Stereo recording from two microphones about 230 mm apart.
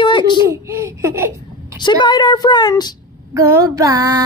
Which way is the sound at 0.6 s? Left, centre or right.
Centre.